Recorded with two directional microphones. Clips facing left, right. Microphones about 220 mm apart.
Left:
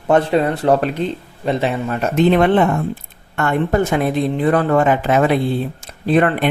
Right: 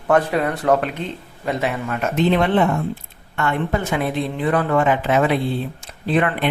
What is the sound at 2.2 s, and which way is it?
A man's voice, 50° left (ahead or behind).